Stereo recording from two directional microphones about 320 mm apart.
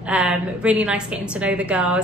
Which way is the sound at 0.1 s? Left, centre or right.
Centre.